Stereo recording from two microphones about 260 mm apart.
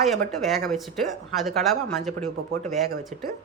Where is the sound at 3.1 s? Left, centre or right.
Right.